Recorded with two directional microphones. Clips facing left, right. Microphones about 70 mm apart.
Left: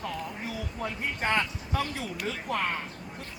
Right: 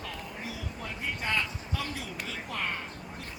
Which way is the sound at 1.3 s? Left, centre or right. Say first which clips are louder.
Left 4 dB; left.